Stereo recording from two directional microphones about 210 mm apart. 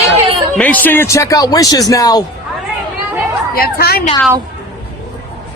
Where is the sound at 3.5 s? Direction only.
45° left (ahead or behind).